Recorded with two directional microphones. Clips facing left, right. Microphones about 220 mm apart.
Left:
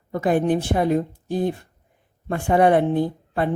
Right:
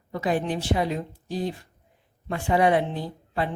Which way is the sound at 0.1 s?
50° left (ahead or behind).